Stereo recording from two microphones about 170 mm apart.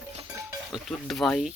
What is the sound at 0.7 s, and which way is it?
Speech, centre (ahead or behind).